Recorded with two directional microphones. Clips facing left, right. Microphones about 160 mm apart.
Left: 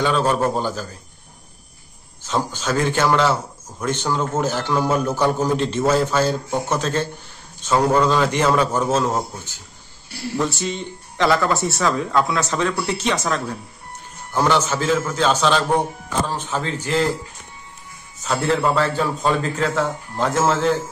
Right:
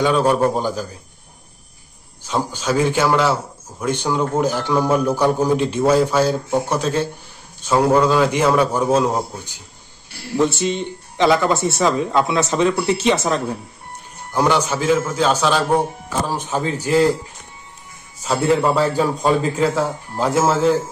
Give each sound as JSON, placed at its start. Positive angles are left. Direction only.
{"t": 0.0, "sound": "a man's voice", "side_deg": -10}
{"t": 2.2, "sound": "a man's voice", "side_deg": -10}
{"t": 11.1, "sound": "speech", "side_deg": -20}
{"t": 11.5, "sound": "speech", "side_deg": 0}
{"t": 11.8, "sound": "speech", "side_deg": -20}
{"t": 14.3, "sound": "a man's voice", "side_deg": -10}
{"t": 18.2, "sound": "a man's voice", "side_deg": -10}